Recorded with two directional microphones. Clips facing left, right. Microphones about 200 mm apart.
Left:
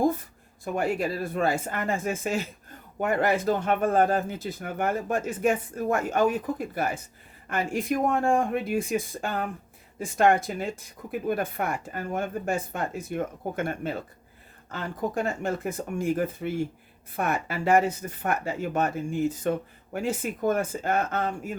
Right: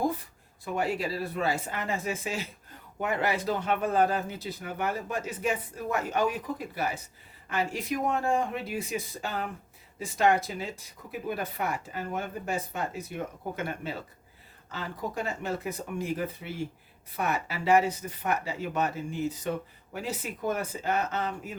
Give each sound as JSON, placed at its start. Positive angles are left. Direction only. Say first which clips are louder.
{"t": 0.6, "sound": "speech", "louder": "left 3 dB", "side_deg": 50}